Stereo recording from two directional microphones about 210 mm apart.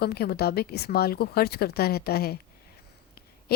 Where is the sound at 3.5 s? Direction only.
50° left (ahead or behind).